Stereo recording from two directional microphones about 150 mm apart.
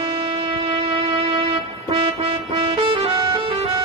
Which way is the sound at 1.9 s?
35° right (ahead or behind).